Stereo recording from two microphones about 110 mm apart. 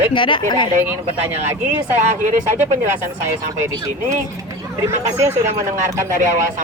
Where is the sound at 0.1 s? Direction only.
50° left (ahead or behind).